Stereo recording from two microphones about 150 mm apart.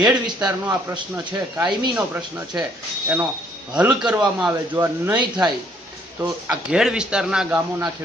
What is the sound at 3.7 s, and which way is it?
A man's voice, 10° right (ahead or behind).